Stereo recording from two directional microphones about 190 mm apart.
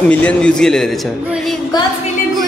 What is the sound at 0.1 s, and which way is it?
Speech, 5° left (ahead or behind).